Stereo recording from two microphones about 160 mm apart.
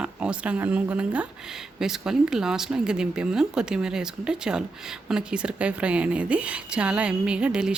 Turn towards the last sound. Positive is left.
turn(degrees=-5)  # may be behind; listen again after turning